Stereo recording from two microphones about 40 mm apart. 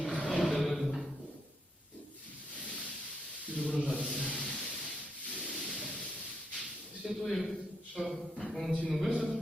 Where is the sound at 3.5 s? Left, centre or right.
Left.